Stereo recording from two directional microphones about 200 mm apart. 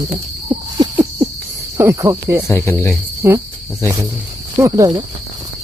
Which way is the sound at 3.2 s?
10° right (ahead or behind).